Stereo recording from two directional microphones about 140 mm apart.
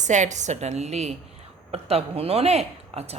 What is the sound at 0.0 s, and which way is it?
A woman's voice, 60° right (ahead or behind).